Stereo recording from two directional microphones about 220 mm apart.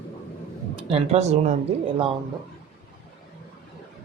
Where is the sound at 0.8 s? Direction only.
25° right (ahead or behind).